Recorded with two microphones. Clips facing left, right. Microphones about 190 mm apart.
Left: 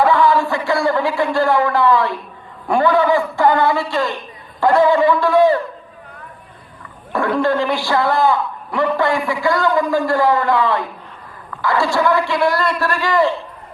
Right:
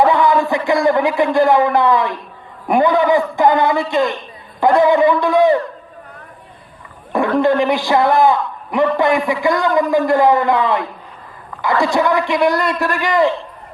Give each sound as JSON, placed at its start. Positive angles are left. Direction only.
{"t": 0.0, "sound": "a man's voice", "side_deg": -15}
{"t": 7.3, "sound": "a man's voice", "side_deg": -15}